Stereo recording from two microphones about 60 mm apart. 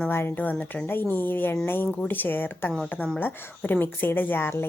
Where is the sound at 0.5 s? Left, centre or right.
Centre.